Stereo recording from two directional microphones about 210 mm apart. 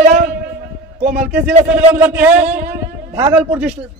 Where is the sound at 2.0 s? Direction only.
10° right (ahead or behind).